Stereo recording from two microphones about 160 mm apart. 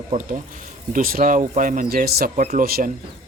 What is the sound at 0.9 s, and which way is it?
Speech, 60° right (ahead or behind).